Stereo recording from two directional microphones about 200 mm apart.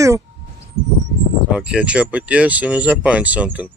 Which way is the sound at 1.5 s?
5° right (ahead or behind).